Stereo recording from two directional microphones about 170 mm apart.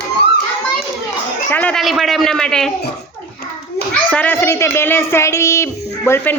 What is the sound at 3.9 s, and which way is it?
A child's voice, 10° left (ahead or behind).